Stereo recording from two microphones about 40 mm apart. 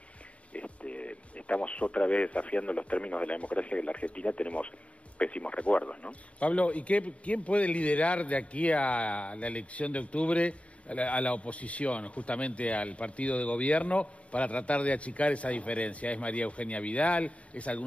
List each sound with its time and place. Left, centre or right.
0.5 s speech: left